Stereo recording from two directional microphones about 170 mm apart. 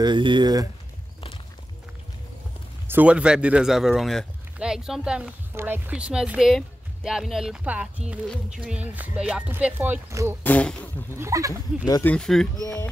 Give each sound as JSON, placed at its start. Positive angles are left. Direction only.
{"t": 0.0, "sound": "speech", "side_deg": -25}
{"t": 2.9, "sound": "speech", "side_deg": -10}
{"t": 10.4, "sound": "speech", "side_deg": 10}
{"t": 11.1, "sound": "speech", "side_deg": -20}
{"t": 11.9, "sound": "speech", "side_deg": 10}